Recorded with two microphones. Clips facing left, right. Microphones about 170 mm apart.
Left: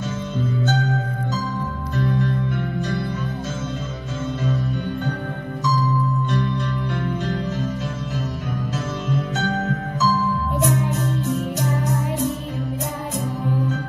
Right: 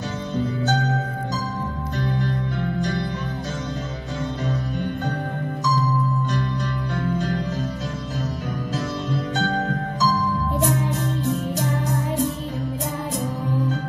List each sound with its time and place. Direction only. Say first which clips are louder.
6.4 s music: left 2 dB; 35° right (ahead or behind)
8.7 s music: even; 35° right (ahead or behind)